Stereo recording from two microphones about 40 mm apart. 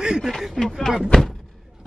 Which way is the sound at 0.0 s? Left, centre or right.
Centre.